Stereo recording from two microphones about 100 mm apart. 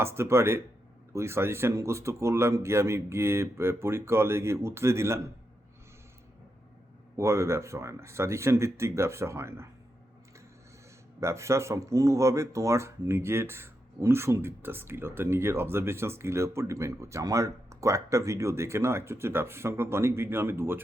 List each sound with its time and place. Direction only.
0.0 s speech: 25° right (ahead or behind)
7.2 s speech: 30° right (ahead or behind)
11.2 s speech: 30° right (ahead or behind)